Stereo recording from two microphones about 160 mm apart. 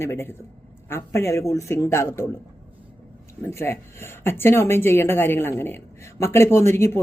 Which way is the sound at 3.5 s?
15° left (ahead or behind).